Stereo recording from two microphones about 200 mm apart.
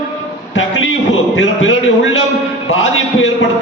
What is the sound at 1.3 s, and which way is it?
Speech, 70° left (ahead or behind).